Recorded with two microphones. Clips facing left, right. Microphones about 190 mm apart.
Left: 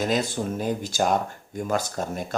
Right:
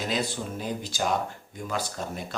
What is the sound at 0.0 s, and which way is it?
Speech, 45° left (ahead or behind).